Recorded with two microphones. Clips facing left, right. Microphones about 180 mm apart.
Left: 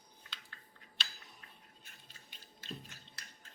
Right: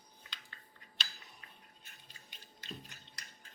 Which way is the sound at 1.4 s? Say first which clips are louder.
Even; 5° right (ahead or behind).